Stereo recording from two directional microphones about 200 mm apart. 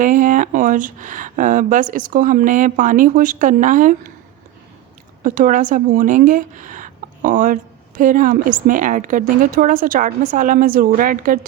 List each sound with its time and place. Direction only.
0.0 s a woman's voice: 40° right (ahead or behind)
5.2 s a woman's voice: 40° right (ahead or behind)